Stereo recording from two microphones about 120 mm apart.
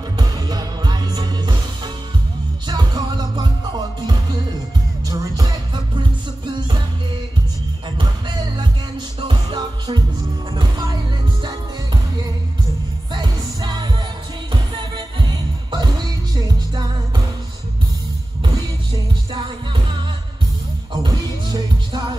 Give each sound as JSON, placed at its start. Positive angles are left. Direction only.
{"t": 0.2, "sound": "music", "side_deg": -35}
{"t": 2.6, "sound": "music", "side_deg": -35}
{"t": 8.0, "sound": "music", "side_deg": -40}
{"t": 13.1, "sound": "music", "side_deg": -35}
{"t": 20.9, "sound": "music", "side_deg": -35}